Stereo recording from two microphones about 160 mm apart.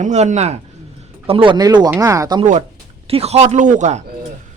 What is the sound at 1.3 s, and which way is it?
Speech, 30° right (ahead or behind).